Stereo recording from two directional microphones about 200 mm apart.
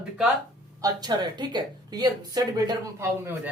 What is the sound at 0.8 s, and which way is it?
A woman's voice, 20° right (ahead or behind).